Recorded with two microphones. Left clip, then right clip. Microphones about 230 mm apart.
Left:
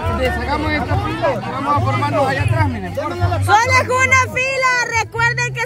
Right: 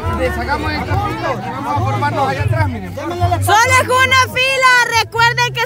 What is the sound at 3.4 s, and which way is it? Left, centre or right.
Speech, centre.